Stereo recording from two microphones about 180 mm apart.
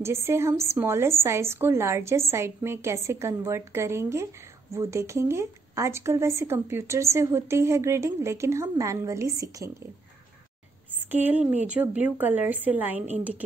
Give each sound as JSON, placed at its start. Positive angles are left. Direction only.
{"t": 0.0, "sound": "speech", "side_deg": -15}
{"t": 11.1, "sound": "speech", "side_deg": -10}